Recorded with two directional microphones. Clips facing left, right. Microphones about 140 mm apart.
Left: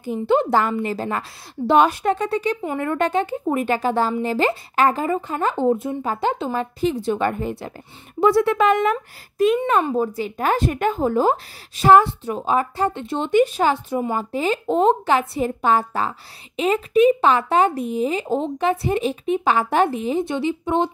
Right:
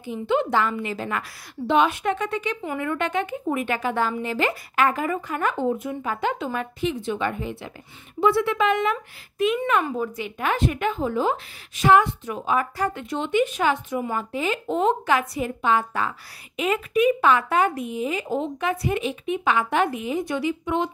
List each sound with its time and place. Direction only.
0.0 s speech: 40° left (ahead or behind)